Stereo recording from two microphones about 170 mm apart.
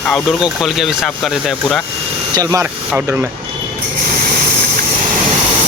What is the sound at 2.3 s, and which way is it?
Speech, 20° right (ahead or behind).